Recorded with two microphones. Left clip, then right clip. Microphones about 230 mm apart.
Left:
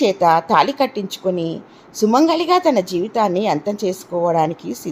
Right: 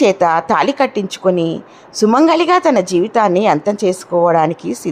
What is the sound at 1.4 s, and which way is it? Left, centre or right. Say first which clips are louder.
Speech: right 5 dB; right.